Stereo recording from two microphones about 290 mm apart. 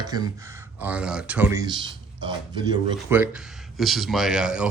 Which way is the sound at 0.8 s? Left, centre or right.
Centre.